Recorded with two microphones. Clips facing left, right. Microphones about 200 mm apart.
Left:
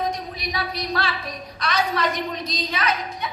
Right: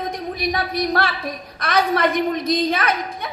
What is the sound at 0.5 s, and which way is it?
A woman's voice, 55° right (ahead or behind).